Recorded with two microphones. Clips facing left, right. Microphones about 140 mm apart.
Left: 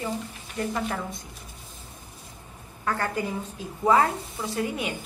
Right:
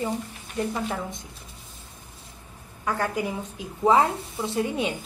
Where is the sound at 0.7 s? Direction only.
15° right (ahead or behind).